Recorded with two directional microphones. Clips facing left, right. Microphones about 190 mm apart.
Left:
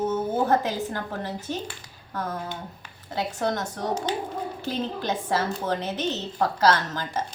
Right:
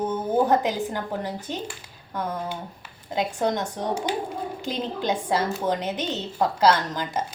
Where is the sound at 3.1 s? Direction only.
15° right (ahead or behind).